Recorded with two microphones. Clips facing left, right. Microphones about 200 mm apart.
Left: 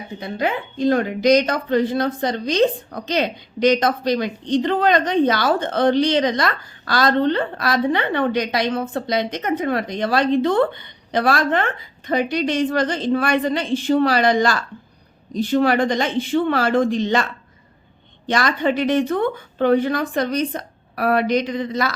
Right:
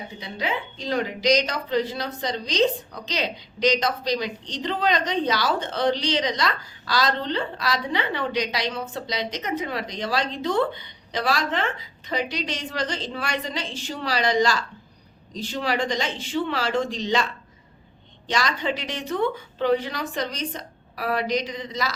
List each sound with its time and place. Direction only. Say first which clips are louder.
0.2 s a woman's voice: left 6 dB; 55° left (ahead or behind)
18.3 s a woman's voice: left 6 dB; 55° left (ahead or behind)